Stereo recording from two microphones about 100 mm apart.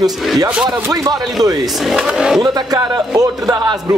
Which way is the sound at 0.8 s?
35° right (ahead or behind).